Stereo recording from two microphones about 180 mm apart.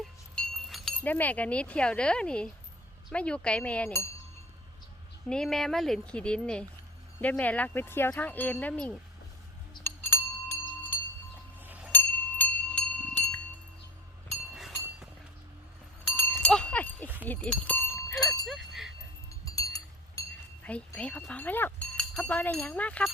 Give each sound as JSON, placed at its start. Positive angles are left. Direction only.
{"t": 0.0, "sound": "wind chime", "side_deg": 0}
{"t": 3.1, "sound": "speech", "side_deg": 5}
{"t": 5.3, "sound": "speech", "side_deg": 5}
{"t": 9.8, "sound": "chink", "side_deg": 10}
{"t": 11.6, "sound": "a sound", "side_deg": -10}
{"t": 11.9, "sound": "music", "side_deg": 10}
{"t": 14.5, "sound": "chink", "side_deg": 0}
{"t": 16.0, "sound": "goat", "side_deg": 10}
{"t": 17.2, "sound": "cowbell", "side_deg": 10}
{"t": 18.4, "sound": "a sound", "side_deg": 0}
{"t": 19.3, "sound": "chink", "side_deg": 20}
{"t": 20.7, "sound": "speech", "side_deg": 5}